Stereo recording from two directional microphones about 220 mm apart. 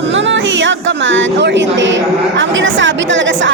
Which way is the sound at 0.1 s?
55° right (ahead or behind).